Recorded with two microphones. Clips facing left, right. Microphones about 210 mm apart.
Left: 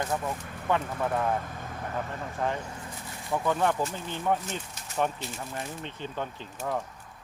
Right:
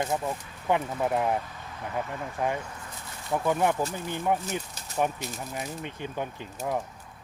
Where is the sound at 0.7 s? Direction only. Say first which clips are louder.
Right 2 dB; 15° right (ahead or behind).